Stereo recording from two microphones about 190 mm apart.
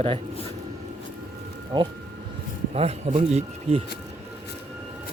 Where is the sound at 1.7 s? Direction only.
25° right (ahead or behind).